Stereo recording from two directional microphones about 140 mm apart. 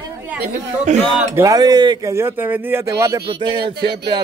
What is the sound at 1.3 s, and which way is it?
Speech, 25° right (ahead or behind).